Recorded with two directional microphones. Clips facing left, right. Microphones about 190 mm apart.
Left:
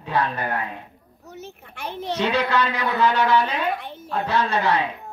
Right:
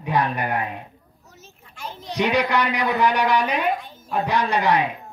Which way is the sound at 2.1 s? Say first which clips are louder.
Right 2 dB; 15° right (ahead or behind).